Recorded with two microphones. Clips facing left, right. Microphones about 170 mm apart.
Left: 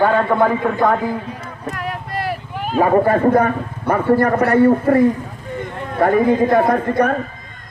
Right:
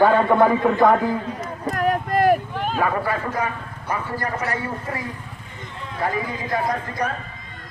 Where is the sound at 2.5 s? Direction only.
5° left (ahead or behind).